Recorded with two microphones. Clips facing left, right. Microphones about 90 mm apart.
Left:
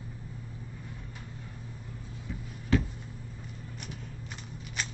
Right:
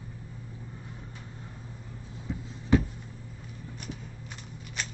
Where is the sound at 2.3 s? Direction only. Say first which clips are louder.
Right 4 dB; 20° right (ahead or behind).